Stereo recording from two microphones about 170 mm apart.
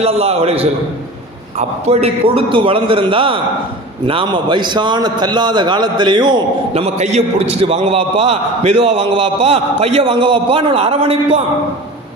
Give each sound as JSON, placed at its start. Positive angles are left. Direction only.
{"t": 0.0, "sound": "a man's voice", "side_deg": -35}